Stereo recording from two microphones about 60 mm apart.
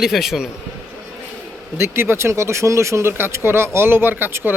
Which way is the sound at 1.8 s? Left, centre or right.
Right.